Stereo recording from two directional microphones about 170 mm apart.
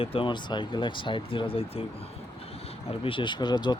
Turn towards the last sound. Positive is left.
turn(degrees=25)  # may be behind; listen again after turning